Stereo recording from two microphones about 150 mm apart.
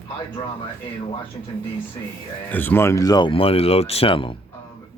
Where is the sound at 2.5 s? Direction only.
10° left (ahead or behind); by 4.4 s 35° left (ahead or behind).